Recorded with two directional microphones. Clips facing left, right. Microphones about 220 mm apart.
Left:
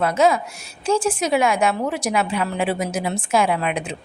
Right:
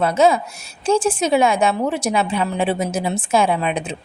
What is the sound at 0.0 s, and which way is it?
A woman's voice, 25° right (ahead or behind).